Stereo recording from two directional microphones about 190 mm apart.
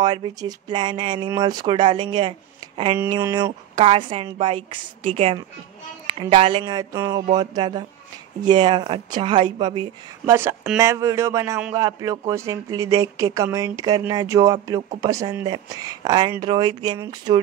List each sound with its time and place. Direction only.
0.0 s speech: 20° right (ahead or behind)
10.3 s speech: 10° right (ahead or behind)